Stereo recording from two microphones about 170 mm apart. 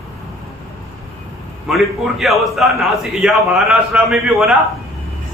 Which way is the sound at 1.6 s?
Centre (ahead or behind).